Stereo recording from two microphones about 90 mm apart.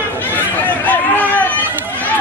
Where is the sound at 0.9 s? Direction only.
20° left (ahead or behind).